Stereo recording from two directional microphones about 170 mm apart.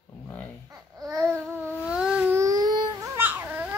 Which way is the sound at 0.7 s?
20° right (ahead or behind).